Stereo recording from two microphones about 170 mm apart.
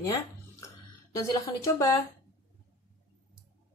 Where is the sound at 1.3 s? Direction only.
20° left (ahead or behind).